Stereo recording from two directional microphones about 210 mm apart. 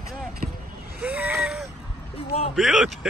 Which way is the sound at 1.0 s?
5° right (ahead or behind).